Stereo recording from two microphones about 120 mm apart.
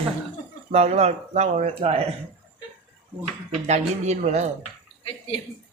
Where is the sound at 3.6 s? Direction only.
70° right (ahead or behind).